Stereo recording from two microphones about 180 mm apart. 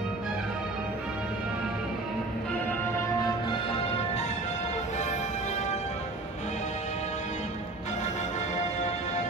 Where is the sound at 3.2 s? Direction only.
30° left (ahead or behind).